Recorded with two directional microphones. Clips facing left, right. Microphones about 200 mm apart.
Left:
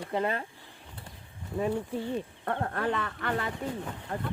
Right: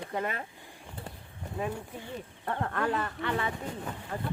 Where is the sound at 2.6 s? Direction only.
40° left (ahead or behind).